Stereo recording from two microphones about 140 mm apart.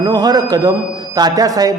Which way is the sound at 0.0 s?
25° right (ahead or behind).